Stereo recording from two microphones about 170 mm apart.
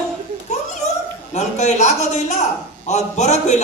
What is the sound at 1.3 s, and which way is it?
A man's voice, 45° left (ahead or behind).